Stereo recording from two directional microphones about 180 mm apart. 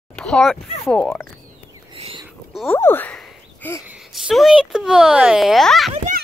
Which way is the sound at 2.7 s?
10° left (ahead or behind).